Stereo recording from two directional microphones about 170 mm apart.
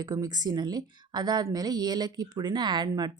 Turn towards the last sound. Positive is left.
turn(degrees=-25)  # may be behind; listen again after turning